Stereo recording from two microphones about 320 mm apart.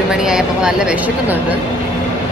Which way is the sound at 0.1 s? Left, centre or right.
Centre.